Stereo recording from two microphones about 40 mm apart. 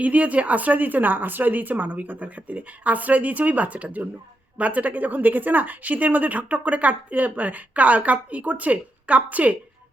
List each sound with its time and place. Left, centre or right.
0.0 s speech: right